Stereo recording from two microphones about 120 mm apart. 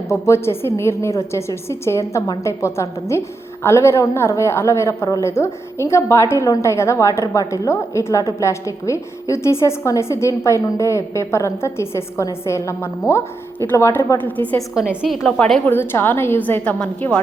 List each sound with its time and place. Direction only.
0.1 s a woman's voice: 25° left (ahead or behind)
14.3 s a woman's voice: 15° left (ahead or behind)
14.8 s a woman's voice: 5° right (ahead or behind)
15.4 s a woman's voice: 10° left (ahead or behind)
15.7 s a woman's voice: 20° left (ahead or behind)